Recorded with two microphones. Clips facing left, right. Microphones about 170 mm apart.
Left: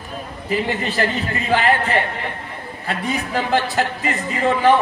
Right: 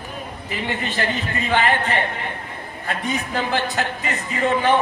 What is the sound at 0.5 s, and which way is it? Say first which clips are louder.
A man's voice: left 6 dB; 35° left (ahead or behind).